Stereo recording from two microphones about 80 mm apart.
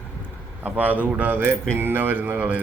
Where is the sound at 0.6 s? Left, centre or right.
Right.